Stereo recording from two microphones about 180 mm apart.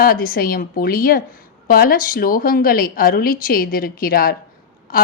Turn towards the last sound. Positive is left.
turn(degrees=55)  # may be behind; listen again after turning